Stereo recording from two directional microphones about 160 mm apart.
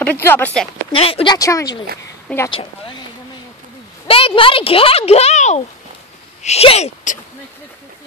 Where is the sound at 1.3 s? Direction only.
20° left (ahead or behind).